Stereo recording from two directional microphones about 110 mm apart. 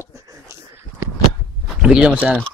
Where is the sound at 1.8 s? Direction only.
10° right (ahead or behind).